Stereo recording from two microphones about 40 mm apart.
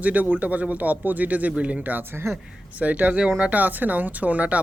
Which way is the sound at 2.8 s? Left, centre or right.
Right.